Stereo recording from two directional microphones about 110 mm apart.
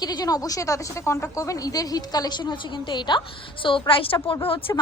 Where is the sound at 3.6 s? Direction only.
50° left (ahead or behind).